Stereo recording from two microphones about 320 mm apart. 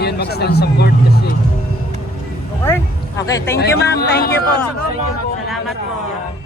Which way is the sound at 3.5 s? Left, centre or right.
Left.